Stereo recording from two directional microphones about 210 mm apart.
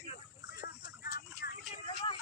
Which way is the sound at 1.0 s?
50° left (ahead or behind).